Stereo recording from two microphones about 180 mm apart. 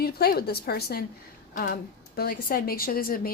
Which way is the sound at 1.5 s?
50° left (ahead or behind).